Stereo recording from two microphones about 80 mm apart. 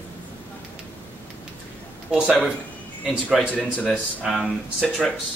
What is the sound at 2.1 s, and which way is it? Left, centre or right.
Speech, centre.